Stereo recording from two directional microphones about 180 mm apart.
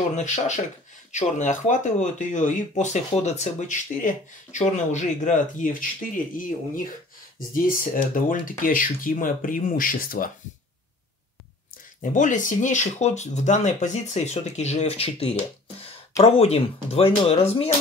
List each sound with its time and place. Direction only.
0.1 s speech: 40° left (ahead or behind)
12.0 s speech: 45° left (ahead or behind)